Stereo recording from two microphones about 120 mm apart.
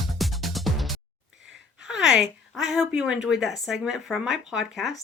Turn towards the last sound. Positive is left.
turn(degrees=0)  # may be behind; listen again after turning